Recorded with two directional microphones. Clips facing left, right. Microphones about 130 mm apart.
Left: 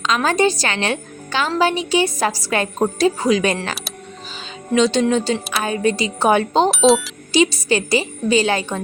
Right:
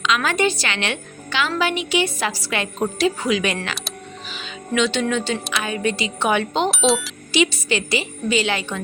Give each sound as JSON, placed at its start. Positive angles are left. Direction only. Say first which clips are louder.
{"t": 0.0, "sound": "a woman's voice", "louder": "left 3 dB", "side_deg": 40}
{"t": 6.7, "sound": "speech", "louder": "left 5 dB", "side_deg": 0}
{"t": 7.3, "sound": "a woman's voice", "louder": "left 4 dB", "side_deg": 40}